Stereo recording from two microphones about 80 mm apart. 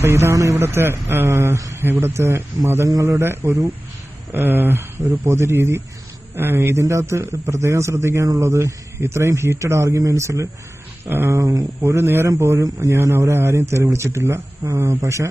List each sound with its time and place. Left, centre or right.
0.0 s a man's voice: right
1.5 s a sound: right
1.8 s a man's voice: right
2.9 s a man's voice: right
4.3 s a man's voice: right
11.1 s speech: right
11.3 s a man's voice: right
12.9 s a man's voice: right